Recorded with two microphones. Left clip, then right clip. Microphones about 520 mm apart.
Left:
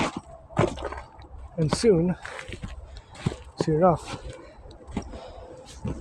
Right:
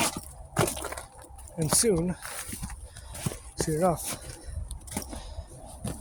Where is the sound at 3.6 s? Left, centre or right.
Right.